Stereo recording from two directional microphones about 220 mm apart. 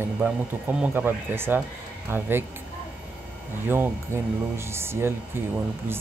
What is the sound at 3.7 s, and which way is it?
Speech, 10° right (ahead or behind).